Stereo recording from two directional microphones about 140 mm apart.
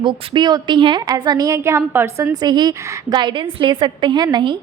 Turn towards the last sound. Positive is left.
turn(degrees=-35)  # may be behind; listen again after turning